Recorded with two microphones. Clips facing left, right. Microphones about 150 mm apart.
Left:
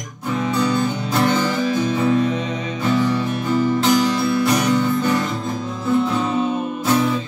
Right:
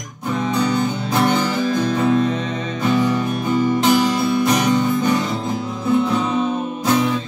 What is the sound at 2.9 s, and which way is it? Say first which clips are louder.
Music: right 1 dB; 15° right (ahead or behind).